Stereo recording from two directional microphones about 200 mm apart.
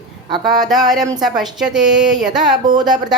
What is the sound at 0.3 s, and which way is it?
Speech, 25° right (ahead or behind).